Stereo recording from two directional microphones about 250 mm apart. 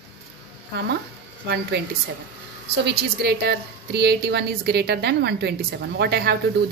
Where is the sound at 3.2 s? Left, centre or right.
Right.